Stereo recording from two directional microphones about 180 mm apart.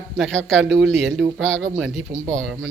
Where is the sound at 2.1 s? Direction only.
20° right (ahead or behind).